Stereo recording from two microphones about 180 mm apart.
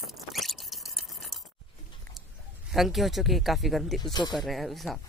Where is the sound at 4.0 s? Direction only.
20° left (ahead or behind).